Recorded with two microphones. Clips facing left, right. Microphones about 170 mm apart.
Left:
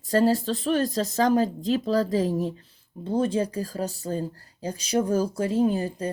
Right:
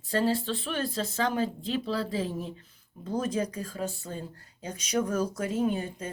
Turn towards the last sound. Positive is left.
turn(degrees=35)  # may be behind; listen again after turning